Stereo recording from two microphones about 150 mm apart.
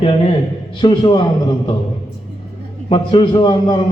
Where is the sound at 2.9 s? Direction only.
35° left (ahead or behind).